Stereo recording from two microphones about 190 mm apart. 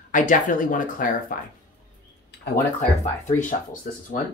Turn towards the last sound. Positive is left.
turn(degrees=45)  # may be behind; listen again after turning